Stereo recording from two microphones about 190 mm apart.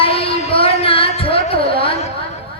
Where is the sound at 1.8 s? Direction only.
30° left (ahead or behind).